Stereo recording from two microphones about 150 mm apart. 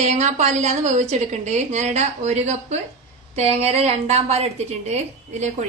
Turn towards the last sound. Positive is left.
turn(degrees=-50)  # may be behind; listen again after turning